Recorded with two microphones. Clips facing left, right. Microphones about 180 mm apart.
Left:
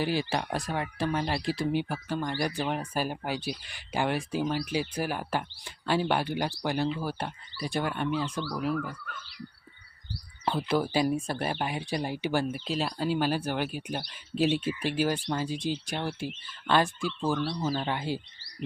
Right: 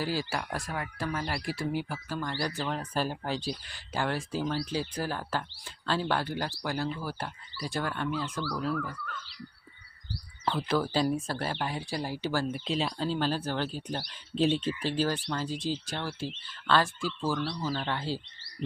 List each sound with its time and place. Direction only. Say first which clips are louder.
0.0 s speech: left 3 dB; 20° left (ahead or behind)
10.4 s speech: left 1 dB; 15° left (ahead or behind)
12.5 s speech: even; 5° left (ahead or behind)